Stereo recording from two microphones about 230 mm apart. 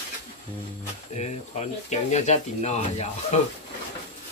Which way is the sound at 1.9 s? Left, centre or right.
Left.